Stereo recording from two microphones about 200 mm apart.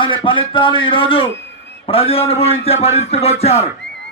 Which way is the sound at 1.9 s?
30° left (ahead or behind).